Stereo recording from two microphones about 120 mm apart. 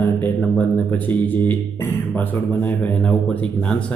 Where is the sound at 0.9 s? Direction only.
15° left (ahead or behind).